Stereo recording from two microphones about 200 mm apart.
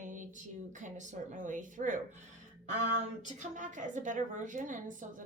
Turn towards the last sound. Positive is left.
turn(degrees=-40)  # may be behind; listen again after turning